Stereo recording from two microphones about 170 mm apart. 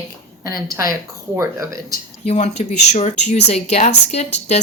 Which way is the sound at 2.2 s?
35° left (ahead or behind).